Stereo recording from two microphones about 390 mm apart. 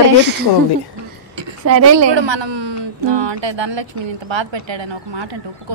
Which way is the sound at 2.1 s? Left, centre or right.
Right.